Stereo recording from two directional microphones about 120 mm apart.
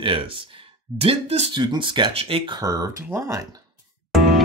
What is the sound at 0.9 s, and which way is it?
Speech, 55° right (ahead or behind).